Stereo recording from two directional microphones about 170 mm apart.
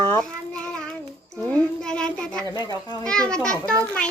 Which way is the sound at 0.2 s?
5° left (ahead or behind).